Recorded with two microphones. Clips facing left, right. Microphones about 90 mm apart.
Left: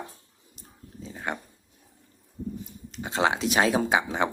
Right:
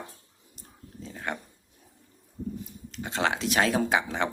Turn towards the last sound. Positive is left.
turn(degrees=15)  # may be behind; listen again after turning